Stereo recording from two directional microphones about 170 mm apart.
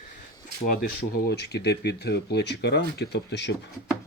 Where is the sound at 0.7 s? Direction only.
60° left (ahead or behind); by 3.5 s 85° left.